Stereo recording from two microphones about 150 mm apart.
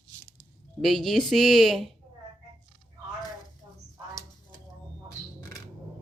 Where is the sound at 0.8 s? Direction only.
Centre (ahead or behind).